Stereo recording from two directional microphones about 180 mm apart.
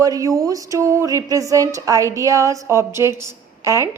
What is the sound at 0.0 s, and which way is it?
A woman's voice, 20° right (ahead or behind).